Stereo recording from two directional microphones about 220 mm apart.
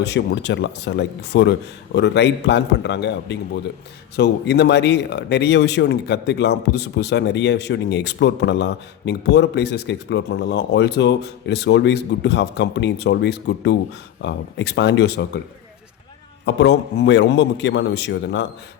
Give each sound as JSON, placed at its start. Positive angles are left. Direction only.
{"t": 0.0, "sound": "speech", "side_deg": 50}
{"t": 16.6, "sound": "speech", "side_deg": 50}